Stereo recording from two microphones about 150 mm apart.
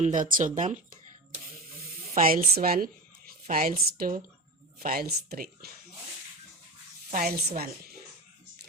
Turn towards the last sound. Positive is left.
turn(degrees=-80)